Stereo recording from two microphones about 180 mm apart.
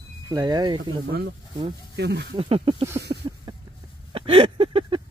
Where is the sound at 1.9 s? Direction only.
70° right (ahead or behind).